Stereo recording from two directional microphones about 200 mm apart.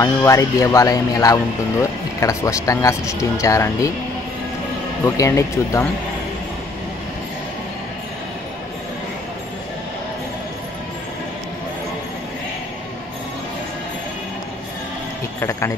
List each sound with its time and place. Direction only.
0.0 s speech: 15° left (ahead or behind)
5.0 s speech: 15° left (ahead or behind)